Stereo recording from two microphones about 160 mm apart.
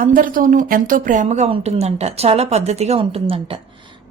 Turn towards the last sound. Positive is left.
turn(degrees=-35)  # may be behind; listen again after turning